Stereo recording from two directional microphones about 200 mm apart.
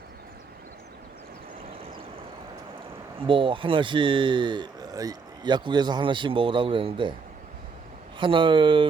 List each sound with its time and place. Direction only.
3.2 s speech: 25° right (ahead or behind)
8.2 s speech: 25° right (ahead or behind)